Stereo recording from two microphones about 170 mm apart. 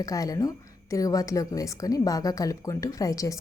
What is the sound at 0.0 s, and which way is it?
Speech, 20° left (ahead or behind).